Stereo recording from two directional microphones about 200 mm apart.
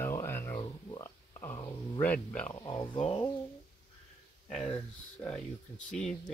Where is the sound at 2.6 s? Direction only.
20° left (ahead or behind).